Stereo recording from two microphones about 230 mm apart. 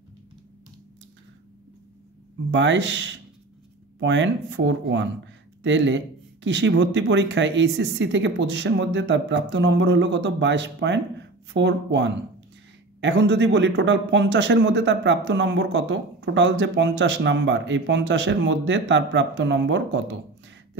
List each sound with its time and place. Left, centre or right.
2.5 s speech: right